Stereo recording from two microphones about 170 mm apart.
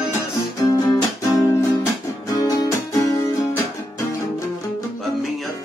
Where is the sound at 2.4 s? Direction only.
20° left (ahead or behind).